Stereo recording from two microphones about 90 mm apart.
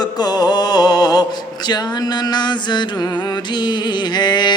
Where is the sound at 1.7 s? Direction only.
50° left (ahead or behind).